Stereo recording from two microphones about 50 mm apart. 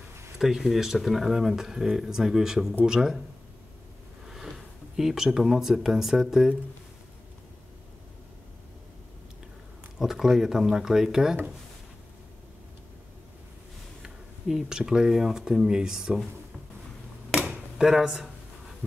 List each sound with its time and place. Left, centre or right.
0.4 s speech: centre
4.3 s speech: centre
9.9 s speech: centre
14.0 s a sound: centre
14.8 s speech: centre
17.6 s speech: centre